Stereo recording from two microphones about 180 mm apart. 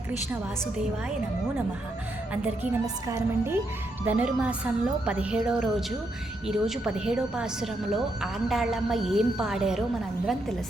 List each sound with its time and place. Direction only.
2.8 s a woman's voice: 15° right (ahead or behind)